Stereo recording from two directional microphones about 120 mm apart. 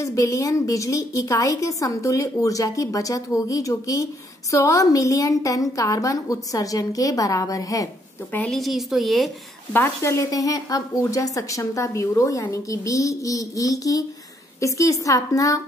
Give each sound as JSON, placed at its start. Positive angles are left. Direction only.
{"t": 0.0, "sound": "a woman's voice", "side_deg": 25}
{"t": 8.5, "sound": "speech", "side_deg": 0}
{"t": 9.7, "sound": "a woman's voice", "side_deg": 20}